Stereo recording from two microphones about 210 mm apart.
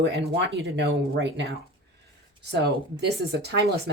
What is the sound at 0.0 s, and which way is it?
Speech, 55° right (ahead or behind).